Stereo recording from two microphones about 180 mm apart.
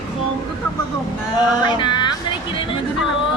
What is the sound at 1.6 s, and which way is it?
Speech, 25° left (ahead or behind).